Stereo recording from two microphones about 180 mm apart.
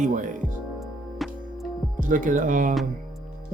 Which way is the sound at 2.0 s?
45° right (ahead or behind).